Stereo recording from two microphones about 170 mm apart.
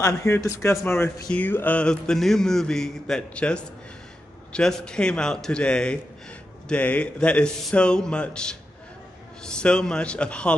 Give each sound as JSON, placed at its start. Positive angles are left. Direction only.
{"t": 0.0, "sound": "a man's voice", "side_deg": 20}